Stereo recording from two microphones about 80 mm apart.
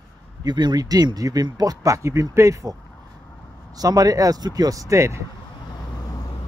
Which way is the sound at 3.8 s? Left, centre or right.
Right.